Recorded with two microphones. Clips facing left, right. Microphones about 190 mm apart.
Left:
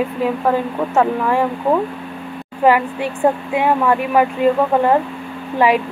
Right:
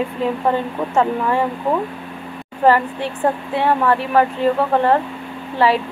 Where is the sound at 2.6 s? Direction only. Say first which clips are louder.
Left 1 dB; 10° left (ahead or behind).